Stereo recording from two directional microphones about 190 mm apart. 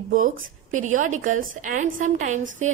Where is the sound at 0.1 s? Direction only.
45° right (ahead or behind).